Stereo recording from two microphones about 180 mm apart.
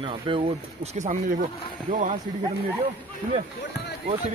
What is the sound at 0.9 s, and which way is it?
Speech, 40° right (ahead or behind).